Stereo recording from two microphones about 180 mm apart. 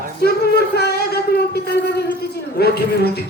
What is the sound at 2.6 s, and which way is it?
Speech, 60° left (ahead or behind).